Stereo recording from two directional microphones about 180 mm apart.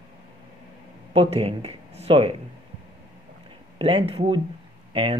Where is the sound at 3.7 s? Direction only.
30° right (ahead or behind).